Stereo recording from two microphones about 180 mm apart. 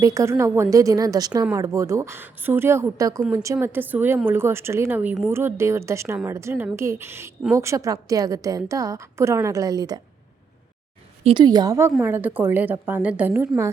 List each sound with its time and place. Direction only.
0.0 s a woman's voice: 20° right (ahead or behind)
11.2 s a woman's voice: 30° right (ahead or behind); by 13.7 s 15° right (ahead or behind)